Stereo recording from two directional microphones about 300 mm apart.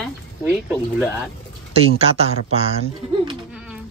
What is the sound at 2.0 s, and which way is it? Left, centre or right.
Speech, centre.